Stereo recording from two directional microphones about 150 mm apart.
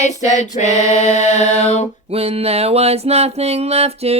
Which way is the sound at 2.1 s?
40° right (ahead or behind).